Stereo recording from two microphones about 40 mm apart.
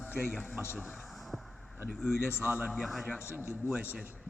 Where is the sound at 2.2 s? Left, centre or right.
Left.